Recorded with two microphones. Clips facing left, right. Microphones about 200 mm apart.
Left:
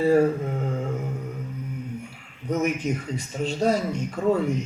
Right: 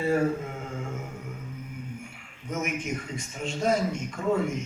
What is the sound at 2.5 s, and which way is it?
Speech, 35° left (ahead or behind).